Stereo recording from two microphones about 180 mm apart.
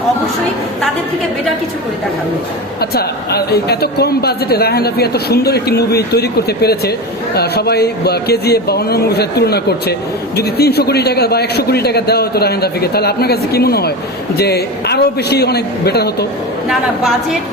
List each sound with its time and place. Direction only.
2.9 s speech: 65° left (ahead or behind)